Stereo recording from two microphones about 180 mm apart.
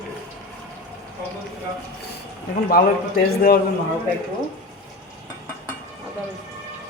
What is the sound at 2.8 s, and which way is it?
Speech, 55° left (ahead or behind).